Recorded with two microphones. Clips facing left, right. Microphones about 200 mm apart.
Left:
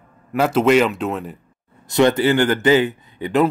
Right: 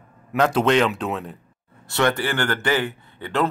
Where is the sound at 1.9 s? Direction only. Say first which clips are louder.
Left 7 dB; 20° left (ahead or behind).